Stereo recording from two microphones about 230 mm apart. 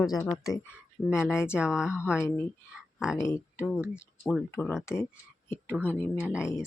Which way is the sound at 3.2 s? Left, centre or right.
Centre.